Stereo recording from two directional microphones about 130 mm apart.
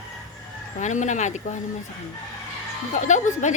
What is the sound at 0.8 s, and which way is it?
Speech, 70° left (ahead or behind).